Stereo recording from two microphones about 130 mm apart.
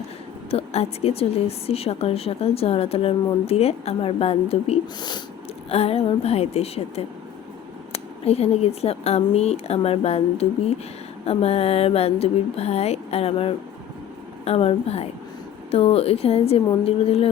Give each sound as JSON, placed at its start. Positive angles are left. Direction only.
{"t": 0.5, "sound": "a woman's voice", "side_deg": 50}
{"t": 4.9, "sound": "speech", "side_deg": 35}
{"t": 5.6, "sound": "a woman's voice", "side_deg": 50}